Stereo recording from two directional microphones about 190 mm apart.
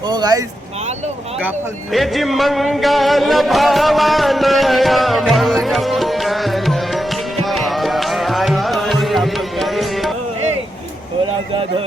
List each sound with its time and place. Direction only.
0.0 s speech: 20° right (ahead or behind)
1.4 s music: 5° right (ahead or behind)